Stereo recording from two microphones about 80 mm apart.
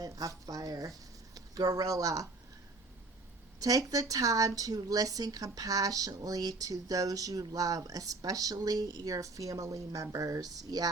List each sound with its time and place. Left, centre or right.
0.0 s speech: right
3.6 s speech: right